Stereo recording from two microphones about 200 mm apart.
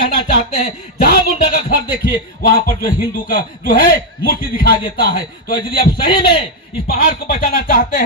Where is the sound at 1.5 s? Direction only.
45° left (ahead or behind).